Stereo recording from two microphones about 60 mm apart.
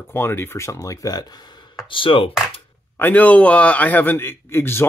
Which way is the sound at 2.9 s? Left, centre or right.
Left.